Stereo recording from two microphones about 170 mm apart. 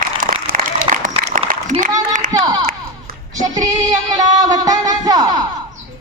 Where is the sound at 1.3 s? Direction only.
50° right (ahead or behind).